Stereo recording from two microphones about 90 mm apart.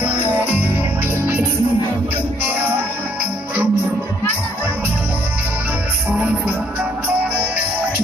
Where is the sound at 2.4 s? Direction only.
20° right (ahead or behind).